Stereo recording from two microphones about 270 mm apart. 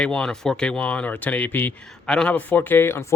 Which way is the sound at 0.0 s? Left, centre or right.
Centre.